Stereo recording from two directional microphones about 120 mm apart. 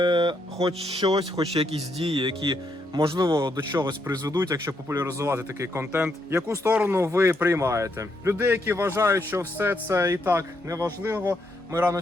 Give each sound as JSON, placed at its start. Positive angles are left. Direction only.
{"t": 0.0, "sound": "speech", "side_deg": -40}
{"t": 1.1, "sound": "speech", "side_deg": -55}
{"t": 4.0, "sound": "speech", "side_deg": -20}